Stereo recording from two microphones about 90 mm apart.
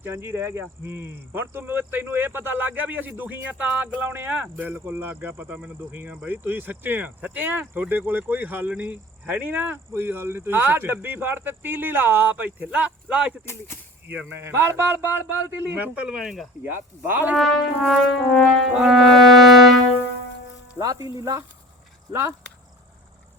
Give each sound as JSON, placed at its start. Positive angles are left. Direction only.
{"t": 0.0, "sound": "speech", "side_deg": -25}
{"t": 13.4, "sound": "speech", "side_deg": 30}
{"t": 14.1, "sound": "speech", "side_deg": -20}
{"t": 16.0, "sound": "brass instrument", "side_deg": -5}
{"t": 16.6, "sound": "speech", "side_deg": -20}
{"t": 17.3, "sound": "brass instrument", "side_deg": 5}
{"t": 20.7, "sound": "speech", "side_deg": -40}